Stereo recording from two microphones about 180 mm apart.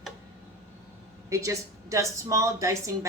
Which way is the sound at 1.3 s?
15° right (ahead or behind).